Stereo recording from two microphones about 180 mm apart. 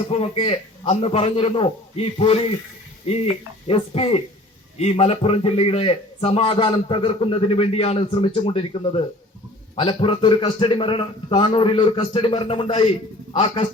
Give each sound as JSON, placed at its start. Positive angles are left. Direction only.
{"t": 0.1, "sound": "a man's voice", "side_deg": 35}
{"t": 3.7, "sound": "a man's voice", "side_deg": 35}